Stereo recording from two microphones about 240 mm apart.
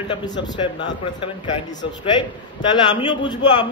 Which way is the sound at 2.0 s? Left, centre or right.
Centre.